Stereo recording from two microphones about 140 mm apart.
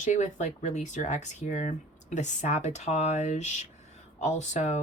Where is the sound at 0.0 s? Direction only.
55° left (ahead or behind).